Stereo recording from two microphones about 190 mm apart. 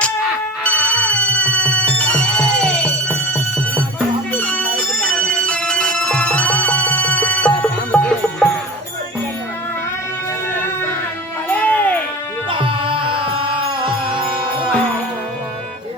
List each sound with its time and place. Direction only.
0.6 s music: 5° left (ahead or behind)
11.4 s music: 10° left (ahead or behind)
12.5 s music: 25° right (ahead or behind)